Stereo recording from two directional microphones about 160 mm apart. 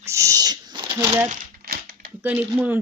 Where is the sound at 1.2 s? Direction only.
55° right (ahead or behind).